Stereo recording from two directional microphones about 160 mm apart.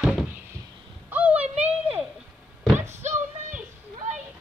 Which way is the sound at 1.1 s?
10° right (ahead or behind).